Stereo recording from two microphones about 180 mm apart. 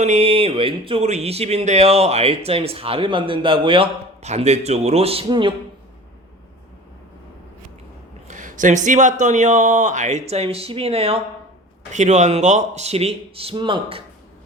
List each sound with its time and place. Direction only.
0.0 s speech: 35° right (ahead or behind)
8.3 s speech: 45° right (ahead or behind); by 14.0 s 30° right (ahead or behind)